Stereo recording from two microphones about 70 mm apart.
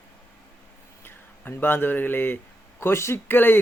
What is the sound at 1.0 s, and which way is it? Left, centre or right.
Speech, left.